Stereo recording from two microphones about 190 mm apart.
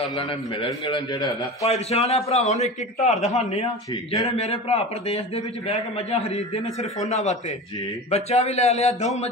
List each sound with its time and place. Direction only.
0.1 s a man's voice: 25° left (ahead or behind)